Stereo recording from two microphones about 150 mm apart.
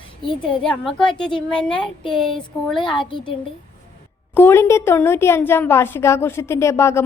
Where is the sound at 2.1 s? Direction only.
5° left (ahead or behind).